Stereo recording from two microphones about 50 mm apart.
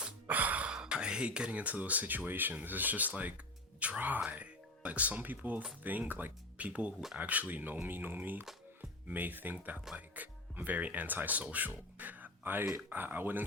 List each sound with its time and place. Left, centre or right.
0.3 s gasp: right
0.7 s speech: centre; by 13.4 s right